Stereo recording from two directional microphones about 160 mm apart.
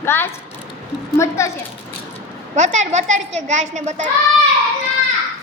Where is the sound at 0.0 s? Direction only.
15° left (ahead or behind).